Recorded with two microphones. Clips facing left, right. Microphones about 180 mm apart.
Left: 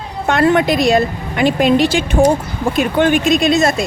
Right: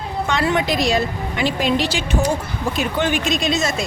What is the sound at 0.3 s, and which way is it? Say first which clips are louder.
A woman's voice: left 8 dB; 55° left (ahead or behind).